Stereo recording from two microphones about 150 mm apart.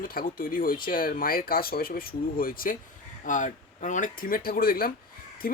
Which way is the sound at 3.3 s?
55° left (ahead or behind).